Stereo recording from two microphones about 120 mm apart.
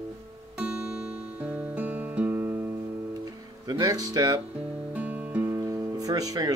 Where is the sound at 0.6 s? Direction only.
10° right (ahead or behind).